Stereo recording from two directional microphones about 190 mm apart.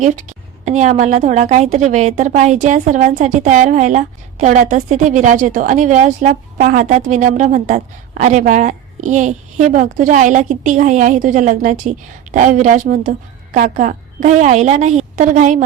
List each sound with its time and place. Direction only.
0.0 s a woman's voice: 40° right (ahead or behind)